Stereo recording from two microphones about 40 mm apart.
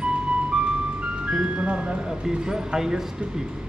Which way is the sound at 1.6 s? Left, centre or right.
Right.